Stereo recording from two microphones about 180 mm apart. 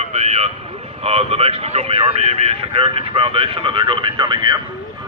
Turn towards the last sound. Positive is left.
turn(degrees=-25)  # may be behind; listen again after turning